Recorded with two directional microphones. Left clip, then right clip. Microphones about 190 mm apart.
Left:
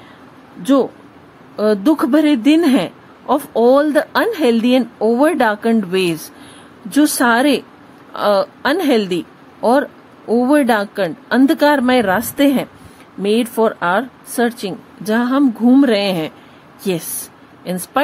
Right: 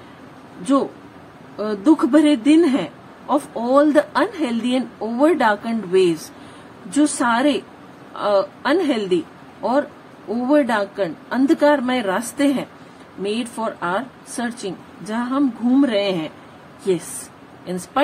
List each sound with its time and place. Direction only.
1.6 s a woman's voice: 50° left (ahead or behind)
17.6 s speech: 50° left (ahead or behind)